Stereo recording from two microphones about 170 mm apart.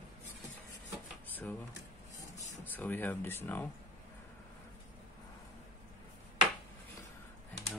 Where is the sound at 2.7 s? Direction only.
10° left (ahead or behind).